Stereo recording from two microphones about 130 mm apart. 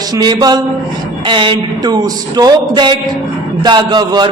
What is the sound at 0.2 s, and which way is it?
Speech, 30° right (ahead or behind).